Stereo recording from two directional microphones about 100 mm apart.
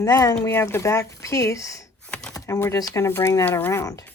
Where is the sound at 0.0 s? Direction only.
35° left (ahead or behind).